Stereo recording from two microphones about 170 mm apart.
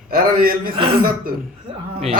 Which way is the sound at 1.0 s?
60° right (ahead or behind).